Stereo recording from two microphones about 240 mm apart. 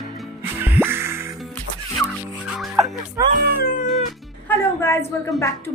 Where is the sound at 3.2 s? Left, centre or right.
Centre.